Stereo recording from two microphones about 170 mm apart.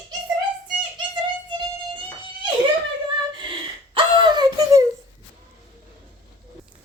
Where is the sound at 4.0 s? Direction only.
25° right (ahead or behind).